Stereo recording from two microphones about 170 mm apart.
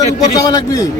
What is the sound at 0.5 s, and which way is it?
Speech, 20° left (ahead or behind).